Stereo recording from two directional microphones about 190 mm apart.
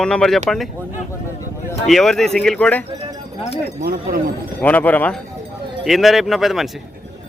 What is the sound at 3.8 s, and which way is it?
Speech, 55° right (ahead or behind).